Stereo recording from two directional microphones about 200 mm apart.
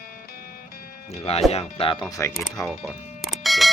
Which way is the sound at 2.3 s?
Centre (ahead or behind).